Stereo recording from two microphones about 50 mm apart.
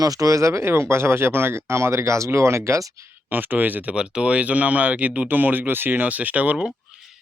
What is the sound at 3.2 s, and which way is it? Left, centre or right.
Speech, right.